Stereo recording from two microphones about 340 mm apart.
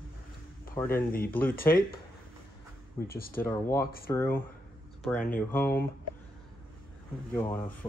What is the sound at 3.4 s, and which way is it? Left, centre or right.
Speech, centre.